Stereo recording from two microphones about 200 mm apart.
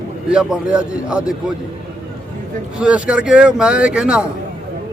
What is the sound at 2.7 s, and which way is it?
Speech, 5° right (ahead or behind).